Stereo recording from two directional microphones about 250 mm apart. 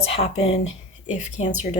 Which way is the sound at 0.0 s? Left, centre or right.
Left.